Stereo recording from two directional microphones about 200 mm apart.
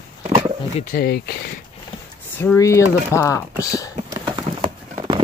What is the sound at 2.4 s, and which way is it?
Speech, 15° left (ahead or behind).